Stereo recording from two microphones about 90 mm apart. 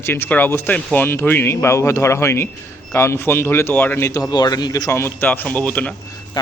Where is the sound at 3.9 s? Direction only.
30° left (ahead or behind).